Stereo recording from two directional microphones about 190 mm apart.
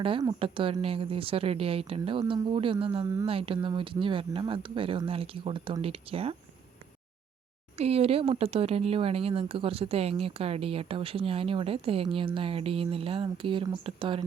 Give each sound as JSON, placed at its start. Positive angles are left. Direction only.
{"t": 0.0, "sound": "speech", "side_deg": -25}
{"t": 7.8, "sound": "speech", "side_deg": -30}